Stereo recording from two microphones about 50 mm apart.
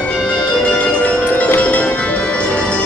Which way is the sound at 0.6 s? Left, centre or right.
Left.